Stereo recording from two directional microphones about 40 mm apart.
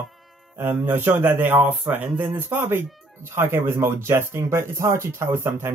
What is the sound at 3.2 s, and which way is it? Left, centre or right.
Speech, right.